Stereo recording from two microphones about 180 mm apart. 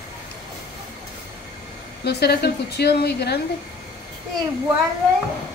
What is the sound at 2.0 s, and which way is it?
Speech, 65° left (ahead or behind).